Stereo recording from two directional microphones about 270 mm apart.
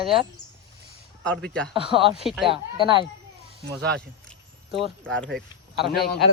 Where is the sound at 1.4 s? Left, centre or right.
Centre.